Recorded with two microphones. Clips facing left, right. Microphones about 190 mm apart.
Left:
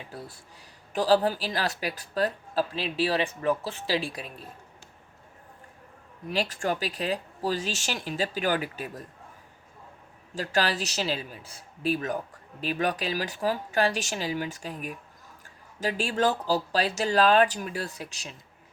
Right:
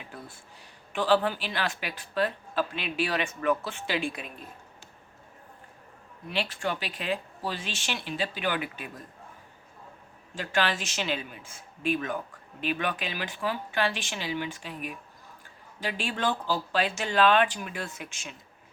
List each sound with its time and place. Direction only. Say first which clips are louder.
0.9 s a woman's voice: left 2 dB; 40° left (ahead or behind)
6.2 s a woman's voice: left 3 dB; 40° left (ahead or behind)
10.3 s a woman's voice: left 2 dB; 40° left (ahead or behind)